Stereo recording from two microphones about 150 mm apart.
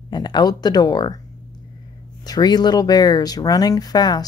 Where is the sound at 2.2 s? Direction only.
25° left (ahead or behind).